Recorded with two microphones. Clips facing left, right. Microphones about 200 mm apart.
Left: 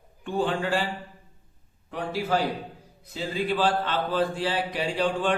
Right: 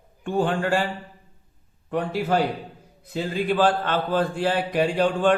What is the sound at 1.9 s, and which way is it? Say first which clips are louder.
A man's voice: right 4 dB; 55° right (ahead or behind).